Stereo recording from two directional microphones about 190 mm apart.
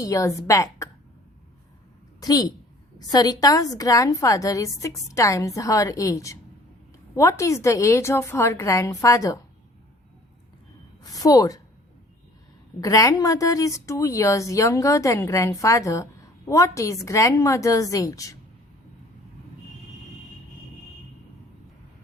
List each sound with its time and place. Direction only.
0.0 s speech: 15° left (ahead or behind)
2.2 s a woman's voice: 20° left (ahead or behind)
11.0 s a woman's voice: 20° left (ahead or behind)
12.8 s speech: 15° left (ahead or behind)